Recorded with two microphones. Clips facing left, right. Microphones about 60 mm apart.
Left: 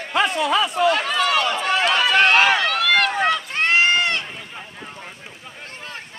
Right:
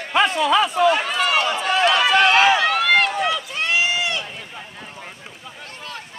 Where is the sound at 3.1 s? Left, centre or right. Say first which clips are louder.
Left 2 dB; left.